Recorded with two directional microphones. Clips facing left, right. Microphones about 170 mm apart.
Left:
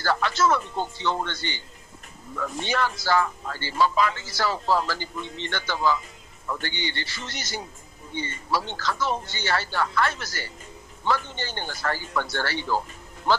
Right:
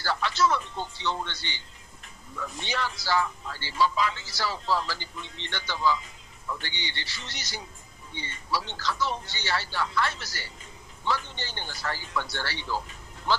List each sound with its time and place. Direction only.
0.0 s speech: 50° left (ahead or behind)